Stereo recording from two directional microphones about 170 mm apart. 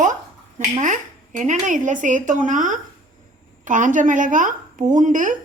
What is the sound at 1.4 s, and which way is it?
A woman's voice, 50° right (ahead or behind).